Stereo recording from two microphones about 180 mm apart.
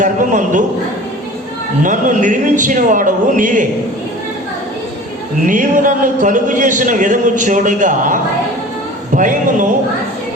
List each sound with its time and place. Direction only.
0.0 s a man's voice: 45° right (ahead or behind)
1.8 s a man's voice: 45° right (ahead or behind)
5.5 s a man's voice: 45° right (ahead or behind)